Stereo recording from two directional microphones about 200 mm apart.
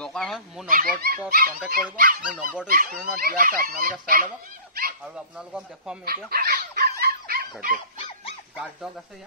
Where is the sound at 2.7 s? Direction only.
45° right (ahead or behind).